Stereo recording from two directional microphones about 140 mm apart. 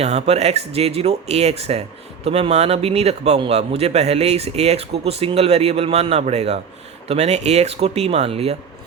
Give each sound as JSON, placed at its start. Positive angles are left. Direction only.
{"t": 0.0, "sound": "a man's voice", "side_deg": -50}